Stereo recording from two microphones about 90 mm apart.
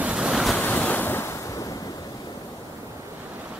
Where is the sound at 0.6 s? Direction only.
15° left (ahead or behind).